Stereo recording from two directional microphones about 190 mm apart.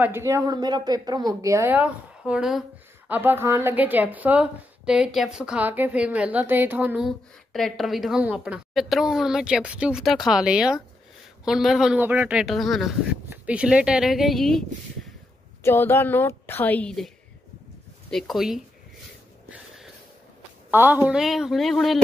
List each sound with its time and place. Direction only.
0.0 s a woman's voice: 15° right (ahead or behind)
15.6 s a woman's voice: 10° left (ahead or behind)
18.1 s a woman's voice: centre (ahead or behind)
20.7 s a woman's voice: 10° right (ahead or behind)